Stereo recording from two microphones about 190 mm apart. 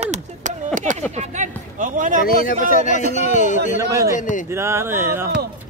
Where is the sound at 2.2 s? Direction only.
50° left (ahead or behind).